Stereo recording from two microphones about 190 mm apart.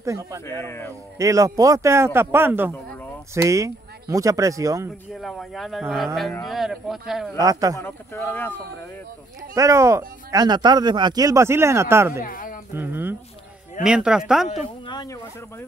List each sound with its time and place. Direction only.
0.0 s speech: 15° right (ahead or behind)
0.5 s speech: 15° left (ahead or behind)
1.1 s speech: 15° right (ahead or behind)
5.1 s speech: centre (ahead or behind)
7.3 s a man's voice: 20° right (ahead or behind)
7.7 s speech: 15° left (ahead or behind)
9.6 s speech: 15° right (ahead or behind)
12.2 s speech: 45° left (ahead or behind)
12.7 s speech: 10° right (ahead or behind)
14.9 s speech: 20° left (ahead or behind)